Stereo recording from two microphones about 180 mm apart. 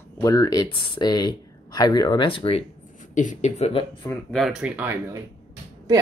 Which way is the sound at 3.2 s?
40° left (ahead or behind).